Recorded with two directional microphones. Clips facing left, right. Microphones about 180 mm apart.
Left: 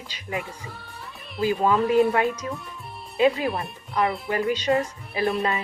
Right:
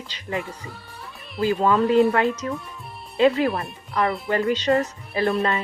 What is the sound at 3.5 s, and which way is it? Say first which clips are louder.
Speech: right 1 dB; centre (ahead or behind).